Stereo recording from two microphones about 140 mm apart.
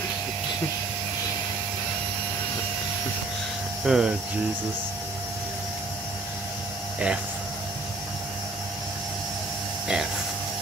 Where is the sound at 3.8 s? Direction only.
5° right (ahead or behind).